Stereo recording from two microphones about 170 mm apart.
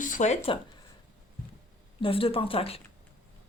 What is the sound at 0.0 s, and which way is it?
Speech, 45° left (ahead or behind).